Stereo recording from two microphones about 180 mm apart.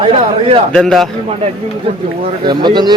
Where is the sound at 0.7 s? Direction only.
Centre (ahead or behind).